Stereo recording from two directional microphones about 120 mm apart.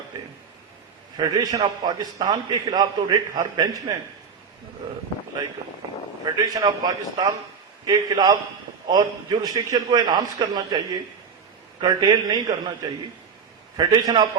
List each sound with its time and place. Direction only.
1.1 s a man's voice: 35° right (ahead or behind)
6.2 s a man's voice: 30° right (ahead or behind)
13.7 s a man's voice: 35° right (ahead or behind)